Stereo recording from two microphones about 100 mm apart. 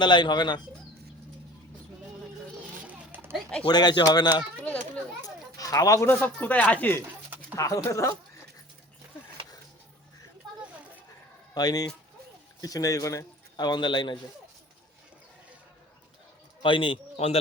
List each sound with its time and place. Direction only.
0.0 s speech: 50° left (ahead or behind)
2.8 s children playing: 20° right (ahead or behind)
3.7 s speech: 45° left (ahead or behind)
4.6 s children playing: 15° left (ahead or behind)
5.2 s a sound: 35° left (ahead or behind)
6.1 s speech: 15° left (ahead or behind)
7.5 s a man's voice: 30° left (ahead or behind)
11.5 s a man's voice: 40° left (ahead or behind)
16.6 s speech: 55° left (ahead or behind)